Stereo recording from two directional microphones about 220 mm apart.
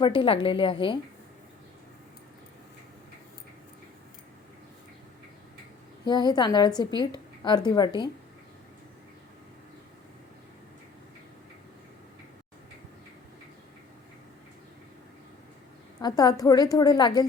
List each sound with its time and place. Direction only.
0.0 s a woman's voice: 20° left (ahead or behind)
6.1 s a woman's voice: 20° left (ahead or behind)
16.0 s a woman's voice: 15° left (ahead or behind)